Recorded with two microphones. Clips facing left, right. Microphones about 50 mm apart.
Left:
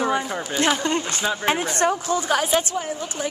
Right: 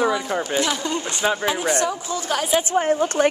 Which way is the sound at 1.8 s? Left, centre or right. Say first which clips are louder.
Left 3 dB; left.